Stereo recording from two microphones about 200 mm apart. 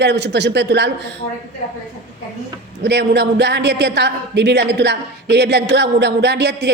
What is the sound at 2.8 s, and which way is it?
A woman's voice, 55° right (ahead or behind).